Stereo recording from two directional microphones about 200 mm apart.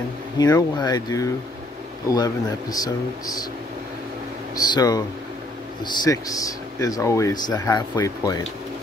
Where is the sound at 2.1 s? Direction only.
20° left (ahead or behind).